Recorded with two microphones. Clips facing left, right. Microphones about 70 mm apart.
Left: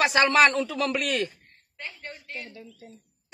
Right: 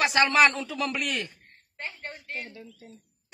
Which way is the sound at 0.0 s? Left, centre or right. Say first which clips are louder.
Left 1 dB; centre.